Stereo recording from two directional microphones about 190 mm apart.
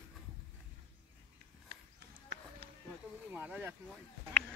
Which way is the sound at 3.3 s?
10° right (ahead or behind).